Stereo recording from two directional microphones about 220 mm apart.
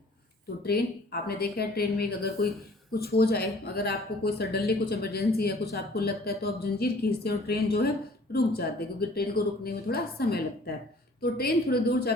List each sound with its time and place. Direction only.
0.6 s speech: 45° left (ahead or behind)